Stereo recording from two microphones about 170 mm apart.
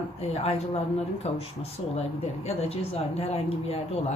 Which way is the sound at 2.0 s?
40° left (ahead or behind).